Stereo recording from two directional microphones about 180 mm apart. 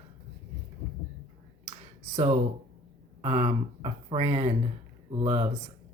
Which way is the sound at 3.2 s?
35° right (ahead or behind).